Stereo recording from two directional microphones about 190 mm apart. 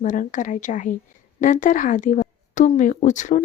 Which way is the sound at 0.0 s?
40° left (ahead or behind).